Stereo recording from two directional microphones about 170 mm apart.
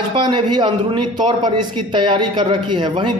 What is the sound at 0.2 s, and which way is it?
A man's voice, 25° right (ahead or behind).